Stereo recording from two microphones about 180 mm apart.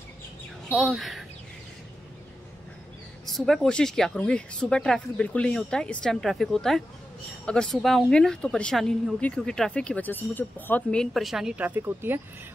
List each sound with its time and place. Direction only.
0.7 s a woman's voice: centre (ahead or behind)
3.3 s a woman's voice: centre (ahead or behind)